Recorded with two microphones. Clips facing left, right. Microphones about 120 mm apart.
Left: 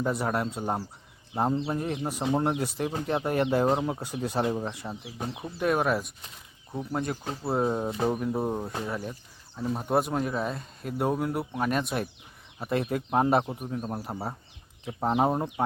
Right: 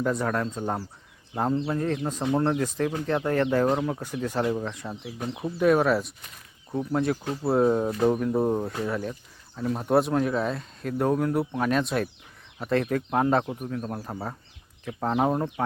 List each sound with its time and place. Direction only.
0.0 s speech: 15° left (ahead or behind)
13.4 s speech: 5° left (ahead or behind)
13.7 s speech: 20° left (ahead or behind)